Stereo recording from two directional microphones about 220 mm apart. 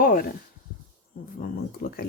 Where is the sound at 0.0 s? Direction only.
40° left (ahead or behind).